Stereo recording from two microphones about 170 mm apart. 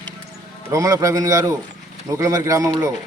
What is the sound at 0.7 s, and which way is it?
Speech, 20° right (ahead or behind).